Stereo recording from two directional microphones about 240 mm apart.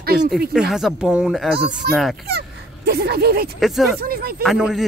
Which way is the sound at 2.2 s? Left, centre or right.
Right.